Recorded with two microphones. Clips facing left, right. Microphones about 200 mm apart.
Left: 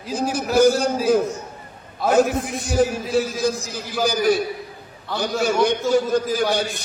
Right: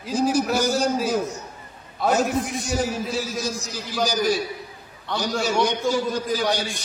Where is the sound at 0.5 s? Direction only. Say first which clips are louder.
Left 5 dB; 55° left (ahead or behind).